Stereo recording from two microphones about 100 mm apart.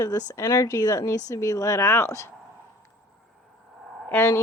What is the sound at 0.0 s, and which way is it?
Speech, 30° left (ahead or behind).